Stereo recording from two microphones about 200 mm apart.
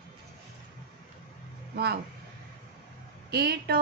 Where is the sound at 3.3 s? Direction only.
50° right (ahead or behind).